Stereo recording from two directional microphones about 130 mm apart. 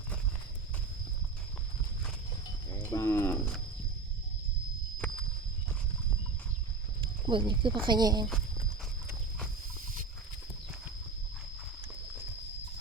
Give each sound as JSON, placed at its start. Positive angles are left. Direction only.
{"t": 2.8, "sound": "cattle", "side_deg": 20}
{"t": 7.0, "sound": "snake", "side_deg": -40}
{"t": 7.9, "sound": "speech", "side_deg": -30}